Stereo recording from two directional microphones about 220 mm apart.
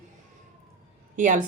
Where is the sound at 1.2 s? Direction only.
35° right (ahead or behind).